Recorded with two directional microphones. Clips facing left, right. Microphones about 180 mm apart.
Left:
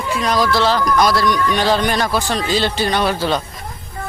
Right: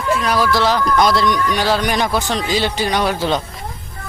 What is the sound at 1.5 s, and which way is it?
Speech, 10° right (ahead or behind).